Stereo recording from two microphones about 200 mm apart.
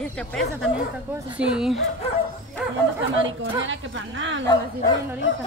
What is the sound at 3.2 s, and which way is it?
A woman's voice, 70° right (ahead or behind).